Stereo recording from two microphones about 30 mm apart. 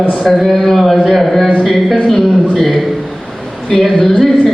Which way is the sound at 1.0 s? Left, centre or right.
Centre.